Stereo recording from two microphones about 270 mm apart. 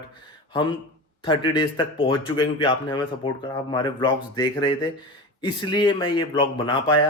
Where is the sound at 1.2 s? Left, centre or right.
Centre.